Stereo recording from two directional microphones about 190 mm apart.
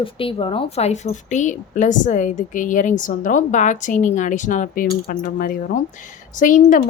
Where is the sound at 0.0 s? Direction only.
30° left (ahead or behind).